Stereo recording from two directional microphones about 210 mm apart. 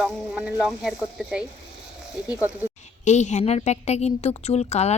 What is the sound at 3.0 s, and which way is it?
A woman's voice, 35° left (ahead or behind).